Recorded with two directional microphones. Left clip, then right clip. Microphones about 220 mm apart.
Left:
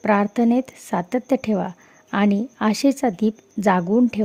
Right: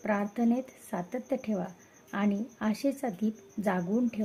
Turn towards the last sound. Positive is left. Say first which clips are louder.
# left 12 dB
turn(degrees=45)  # may be behind; listen again after turning